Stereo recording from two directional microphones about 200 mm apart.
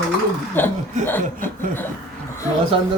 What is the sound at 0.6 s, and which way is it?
Speech, 10° left (ahead or behind).